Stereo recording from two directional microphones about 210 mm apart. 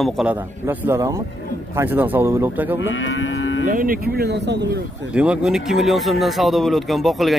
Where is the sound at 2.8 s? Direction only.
65° left (ahead or behind).